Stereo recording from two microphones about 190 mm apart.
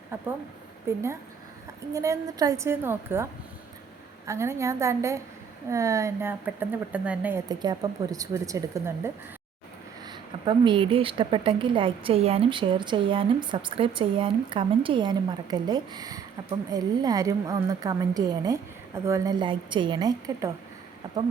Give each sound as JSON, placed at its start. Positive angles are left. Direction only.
{"t": 0.9, "sound": "a woman's voice", "side_deg": -15}
{"t": 4.3, "sound": "a woman's voice", "side_deg": -15}
{"t": 7.4, "sound": "a woman's voice", "side_deg": -20}